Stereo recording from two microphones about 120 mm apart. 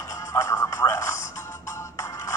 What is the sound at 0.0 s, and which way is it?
Music, 25° left (ahead or behind).